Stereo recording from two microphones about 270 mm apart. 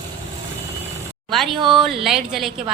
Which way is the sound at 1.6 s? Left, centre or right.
Centre.